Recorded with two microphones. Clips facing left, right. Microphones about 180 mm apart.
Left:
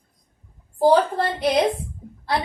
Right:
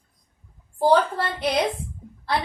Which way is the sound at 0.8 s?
35° left (ahead or behind).